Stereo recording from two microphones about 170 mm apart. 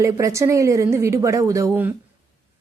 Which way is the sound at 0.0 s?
20° right (ahead or behind).